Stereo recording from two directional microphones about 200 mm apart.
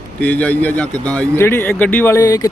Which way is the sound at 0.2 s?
10° left (ahead or behind).